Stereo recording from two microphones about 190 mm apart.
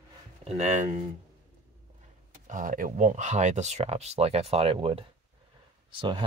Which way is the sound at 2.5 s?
45° right (ahead or behind).